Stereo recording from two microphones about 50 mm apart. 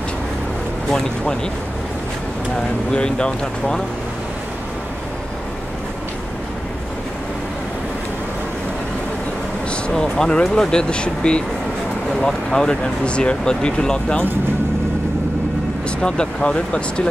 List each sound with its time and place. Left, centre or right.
2.9 s speech: centre
9.7 s speech: centre
16.0 s speech: centre